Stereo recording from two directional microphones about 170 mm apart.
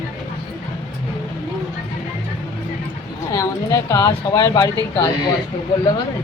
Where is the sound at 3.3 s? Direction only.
20° left (ahead or behind).